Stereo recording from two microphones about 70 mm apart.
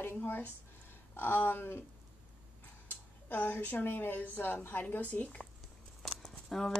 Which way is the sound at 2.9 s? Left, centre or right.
Left.